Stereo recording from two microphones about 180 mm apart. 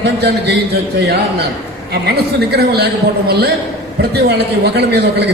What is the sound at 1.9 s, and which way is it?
Speech, 65° right (ahead or behind).